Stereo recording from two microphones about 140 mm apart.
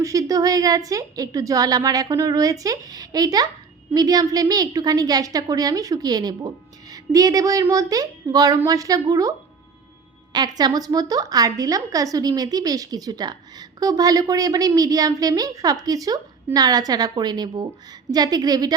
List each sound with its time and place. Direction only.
0.0 s a woman's voice: 25° right (ahead or behind)
10.3 s a woman's voice: 30° right (ahead or behind)